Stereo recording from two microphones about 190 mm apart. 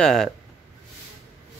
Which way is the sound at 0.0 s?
Centre (ahead or behind).